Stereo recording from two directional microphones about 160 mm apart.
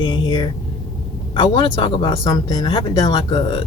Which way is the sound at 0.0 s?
25° left (ahead or behind).